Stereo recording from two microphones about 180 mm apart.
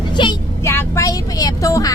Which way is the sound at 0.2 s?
25° left (ahead or behind).